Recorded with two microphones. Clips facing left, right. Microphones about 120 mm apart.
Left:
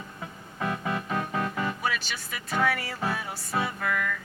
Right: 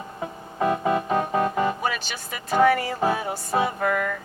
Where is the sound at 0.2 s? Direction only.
30° right (ahead or behind).